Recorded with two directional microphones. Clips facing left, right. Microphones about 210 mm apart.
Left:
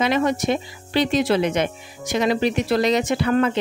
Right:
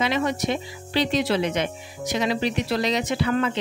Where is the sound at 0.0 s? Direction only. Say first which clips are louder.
Left 4 dB; 50° left (ahead or behind).